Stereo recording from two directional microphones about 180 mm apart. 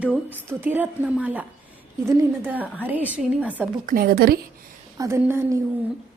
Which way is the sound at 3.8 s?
50° right (ahead or behind).